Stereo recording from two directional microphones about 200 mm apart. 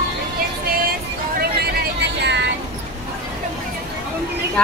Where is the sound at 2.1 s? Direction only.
60° right (ahead or behind).